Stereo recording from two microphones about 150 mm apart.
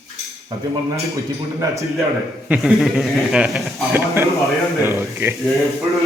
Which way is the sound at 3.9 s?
10° right (ahead or behind).